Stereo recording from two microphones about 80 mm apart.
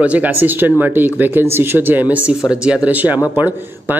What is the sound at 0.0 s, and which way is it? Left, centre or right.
Speech, centre.